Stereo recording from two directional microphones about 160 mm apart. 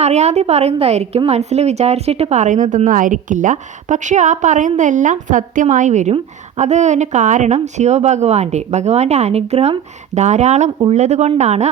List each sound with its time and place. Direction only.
0.0 s a woman's voice: 45° right (ahead or behind)